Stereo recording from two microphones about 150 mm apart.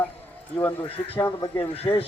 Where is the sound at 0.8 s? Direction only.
40° left (ahead or behind).